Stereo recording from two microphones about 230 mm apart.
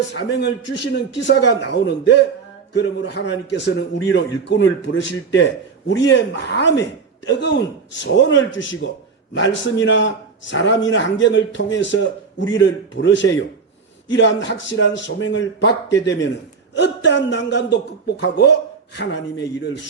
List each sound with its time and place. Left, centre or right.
0.1 s a man's voice: left